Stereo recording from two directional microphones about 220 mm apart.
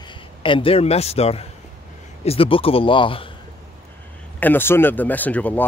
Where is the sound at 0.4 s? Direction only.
25° left (ahead or behind).